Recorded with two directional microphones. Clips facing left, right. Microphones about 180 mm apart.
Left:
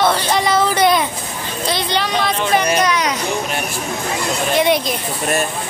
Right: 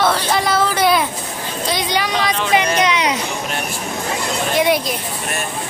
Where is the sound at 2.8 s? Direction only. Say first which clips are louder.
Even; 25° right (ahead or behind).